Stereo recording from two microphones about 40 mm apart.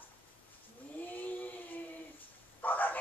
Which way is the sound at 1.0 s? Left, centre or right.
Left.